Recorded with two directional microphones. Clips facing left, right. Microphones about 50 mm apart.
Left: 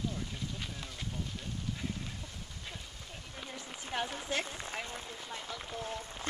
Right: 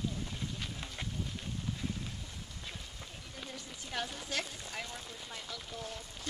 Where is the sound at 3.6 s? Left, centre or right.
Left.